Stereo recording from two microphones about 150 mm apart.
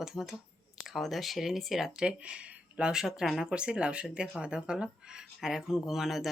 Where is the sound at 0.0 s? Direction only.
5° right (ahead or behind).